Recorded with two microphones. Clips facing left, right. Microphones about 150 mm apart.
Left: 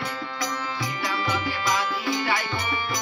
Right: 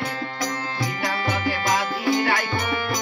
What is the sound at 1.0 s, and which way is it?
Music, 55° right (ahead or behind).